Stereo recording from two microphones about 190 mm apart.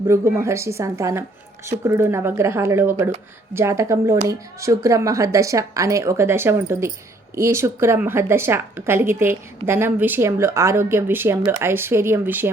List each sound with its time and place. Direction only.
0.1 s a woman's voice: 15° right (ahead or behind)